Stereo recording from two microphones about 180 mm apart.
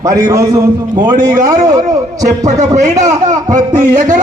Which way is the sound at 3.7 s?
45° right (ahead or behind).